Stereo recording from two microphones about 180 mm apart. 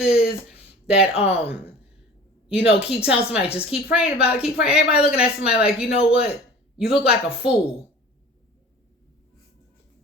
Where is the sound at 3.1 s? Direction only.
35° left (ahead or behind).